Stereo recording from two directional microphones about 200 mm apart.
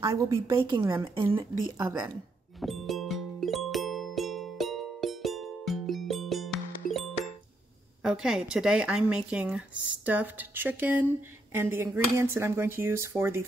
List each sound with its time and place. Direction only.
0.0 s speech: 15° right (ahead or behind)
2.6 s music: centre (ahead or behind)
8.0 s speech: 5° right (ahead or behind)